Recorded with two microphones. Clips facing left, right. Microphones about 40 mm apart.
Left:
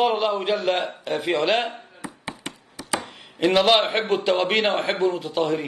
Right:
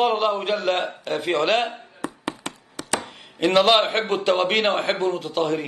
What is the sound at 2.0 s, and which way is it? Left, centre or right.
Tap, right.